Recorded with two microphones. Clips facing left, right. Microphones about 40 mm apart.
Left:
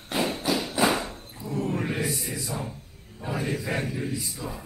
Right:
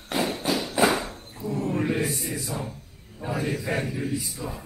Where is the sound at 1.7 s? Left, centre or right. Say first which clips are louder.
Right 4 dB; centre.